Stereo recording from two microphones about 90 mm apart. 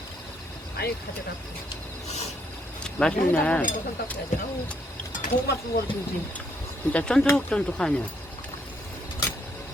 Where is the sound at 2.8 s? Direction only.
10° left (ahead or behind).